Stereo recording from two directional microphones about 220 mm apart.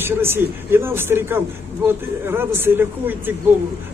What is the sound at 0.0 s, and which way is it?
A man's voice, 10° right (ahead or behind).